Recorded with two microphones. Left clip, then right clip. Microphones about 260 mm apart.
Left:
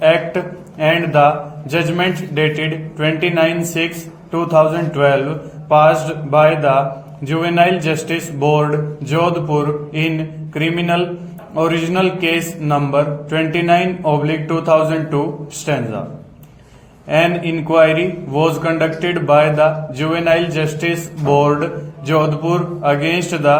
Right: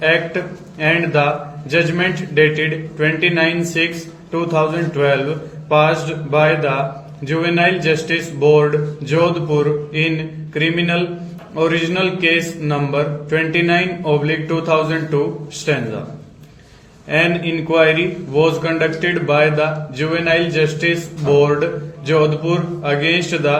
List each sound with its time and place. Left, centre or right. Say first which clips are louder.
0.0 s a man's voice: left 3 dB; left
17.1 s a man's voice: left 1 dB; left